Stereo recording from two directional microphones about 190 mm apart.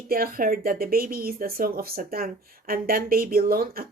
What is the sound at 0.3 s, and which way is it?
Speech, 50° right (ahead or behind).